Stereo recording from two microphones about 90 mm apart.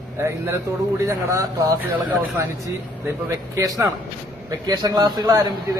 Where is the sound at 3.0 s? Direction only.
35° right (ahead or behind).